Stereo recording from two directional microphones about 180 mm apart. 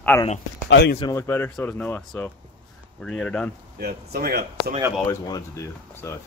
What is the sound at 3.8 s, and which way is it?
Speech, 60° right (ahead or behind).